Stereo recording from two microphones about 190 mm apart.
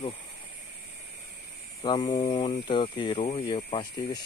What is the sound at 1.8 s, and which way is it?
Speech, 25° left (ahead or behind).